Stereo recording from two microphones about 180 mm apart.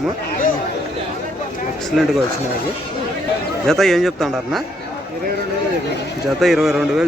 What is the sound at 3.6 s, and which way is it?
Speech, centre (ahead or behind).